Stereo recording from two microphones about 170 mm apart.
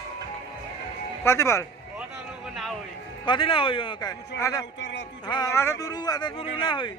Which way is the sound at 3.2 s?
30° left (ahead or behind).